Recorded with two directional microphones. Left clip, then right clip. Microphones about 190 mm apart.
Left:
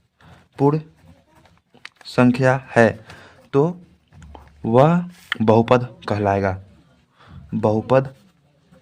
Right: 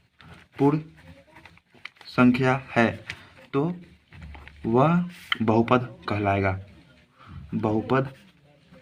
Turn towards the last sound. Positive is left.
turn(degrees=45)  # may be behind; listen again after turning